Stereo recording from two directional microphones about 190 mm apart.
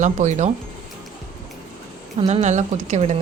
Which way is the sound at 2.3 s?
35° right (ahead or behind).